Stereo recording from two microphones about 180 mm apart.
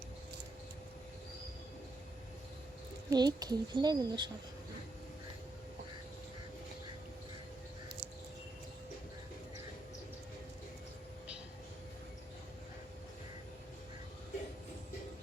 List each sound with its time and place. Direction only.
3.1 s speech: 20° right (ahead or behind)